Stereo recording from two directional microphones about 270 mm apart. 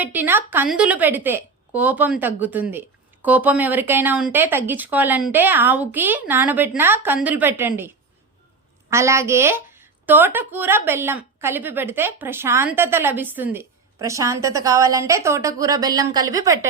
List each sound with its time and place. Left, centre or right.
0.0 s a woman's voice: centre
8.9 s a woman's voice: centre